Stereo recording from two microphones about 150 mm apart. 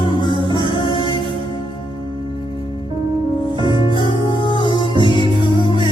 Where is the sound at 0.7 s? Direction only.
30° left (ahead or behind).